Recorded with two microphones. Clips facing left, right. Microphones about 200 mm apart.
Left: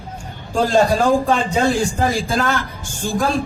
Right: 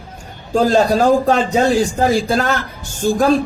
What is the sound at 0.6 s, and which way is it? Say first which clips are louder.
Speech: right 2 dB; 40° right (ahead or behind).